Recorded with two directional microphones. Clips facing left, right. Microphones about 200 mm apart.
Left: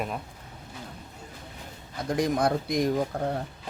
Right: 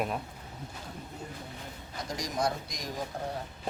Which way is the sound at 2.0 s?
60° left (ahead or behind).